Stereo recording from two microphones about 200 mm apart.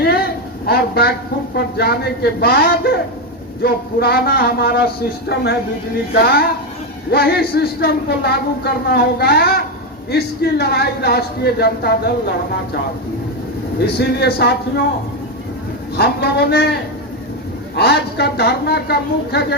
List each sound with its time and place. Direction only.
0.0 s a sound: 50° left (ahead or behind)
0.7 s a woman's voice: 50° left (ahead or behind)
7.1 s speech: 50° left (ahead or behind)
13.7 s a woman's voice: 55° left (ahead or behind)
16.0 s a woman's voice: 55° left (ahead or behind)
17.7 s a woman's voice: 55° left (ahead or behind)